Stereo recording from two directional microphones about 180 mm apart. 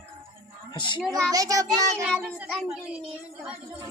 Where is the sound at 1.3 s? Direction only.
20° right (ahead or behind).